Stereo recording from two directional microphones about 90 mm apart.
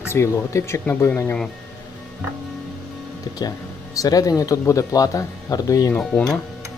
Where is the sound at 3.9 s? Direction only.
40° left (ahead or behind).